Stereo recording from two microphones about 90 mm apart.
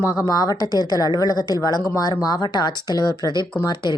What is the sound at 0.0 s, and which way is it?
Speech, 35° left (ahead or behind).